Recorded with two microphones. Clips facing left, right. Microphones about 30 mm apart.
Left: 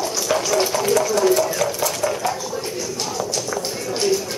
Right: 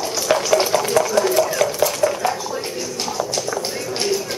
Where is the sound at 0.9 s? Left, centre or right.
Centre.